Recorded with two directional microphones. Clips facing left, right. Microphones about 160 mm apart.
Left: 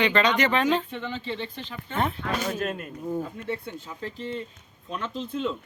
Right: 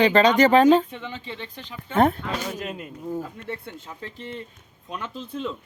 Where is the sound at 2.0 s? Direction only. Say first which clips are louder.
Right 8 dB; 45° right (ahead or behind).